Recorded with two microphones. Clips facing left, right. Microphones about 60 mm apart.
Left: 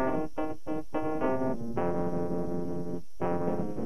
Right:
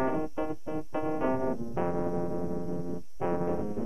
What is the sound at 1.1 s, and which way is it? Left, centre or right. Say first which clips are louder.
Music: even; right.